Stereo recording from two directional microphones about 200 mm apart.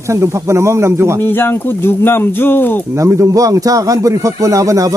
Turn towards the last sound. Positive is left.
turn(degrees=-15)  # may be behind; listen again after turning